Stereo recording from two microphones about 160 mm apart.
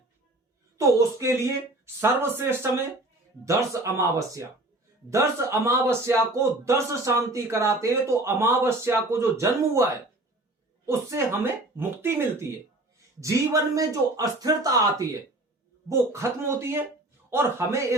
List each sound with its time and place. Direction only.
0.8 s a man's voice: 20° right (ahead or behind)